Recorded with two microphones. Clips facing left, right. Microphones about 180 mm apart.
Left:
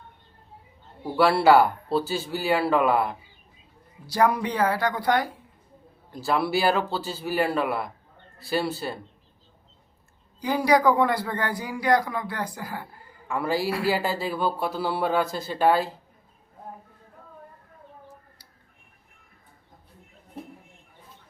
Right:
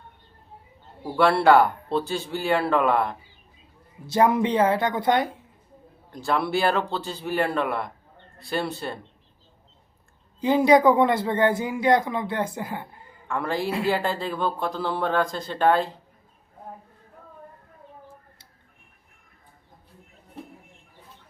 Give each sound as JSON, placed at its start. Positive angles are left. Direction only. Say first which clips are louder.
{"t": 1.1, "sound": "speech", "louder": "even", "side_deg": 5}
{"t": 4.0, "sound": "speech", "louder": "right 2 dB", "side_deg": -25}
{"t": 6.1, "sound": "speech", "louder": "even", "side_deg": 5}
{"t": 10.4, "sound": "speech", "louder": "right 4 dB", "side_deg": -25}
{"t": 13.2, "sound": "a woman's voice", "louder": "left 1 dB", "side_deg": 5}
{"t": 13.7, "sound": "speech", "louder": "even", "side_deg": -25}
{"t": 13.9, "sound": "speech", "louder": "even", "side_deg": 5}